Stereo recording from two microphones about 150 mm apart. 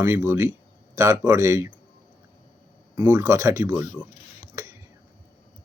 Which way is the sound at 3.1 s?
15° right (ahead or behind).